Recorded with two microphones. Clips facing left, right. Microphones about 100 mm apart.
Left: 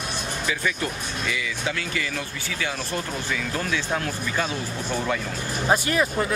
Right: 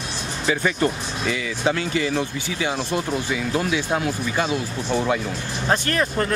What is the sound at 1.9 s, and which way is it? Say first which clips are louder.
Speech: right 7 dB; 25° right (ahead or behind).